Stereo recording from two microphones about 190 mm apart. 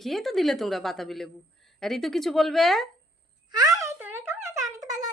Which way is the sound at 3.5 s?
20° right (ahead or behind).